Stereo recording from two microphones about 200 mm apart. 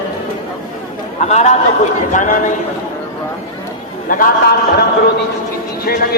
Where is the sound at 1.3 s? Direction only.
35° left (ahead or behind).